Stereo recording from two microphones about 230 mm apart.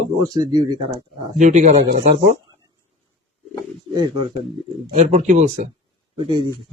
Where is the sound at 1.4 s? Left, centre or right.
Right.